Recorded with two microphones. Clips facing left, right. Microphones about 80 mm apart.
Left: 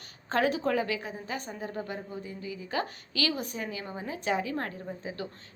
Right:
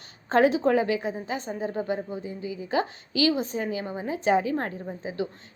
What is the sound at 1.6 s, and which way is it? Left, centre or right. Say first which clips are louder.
A woman's voice: right 7 dB; centre.